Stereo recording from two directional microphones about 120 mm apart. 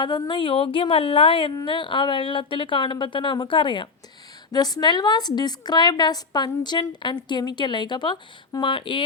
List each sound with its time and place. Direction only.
0.0 s a woman's voice: 40° left (ahead or behind)